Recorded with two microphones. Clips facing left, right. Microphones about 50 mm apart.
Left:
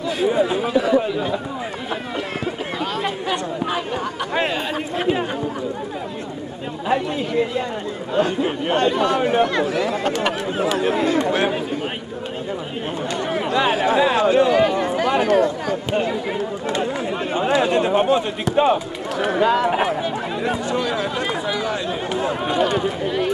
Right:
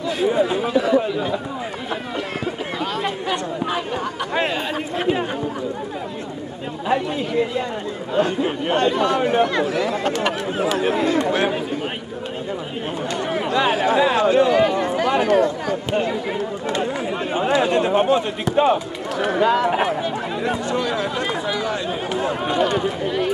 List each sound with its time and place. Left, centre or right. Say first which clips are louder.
0.2 s chatter: even; centre
0.7 s speech: even; centre
2.8 s chatter: even; centre
6.9 s chatter: even; centre
8.1 s speech: even; centre
10.8 s chatter: even; centre
13.2 s chatter: even; centre
13.6 s a sound: even; centre
16.8 s chatter: even; centre
17.6 s a sound: even; centre
18.6 s speech: even; centre
22.1 s a sound: even; centre
22.5 s speech: even; centre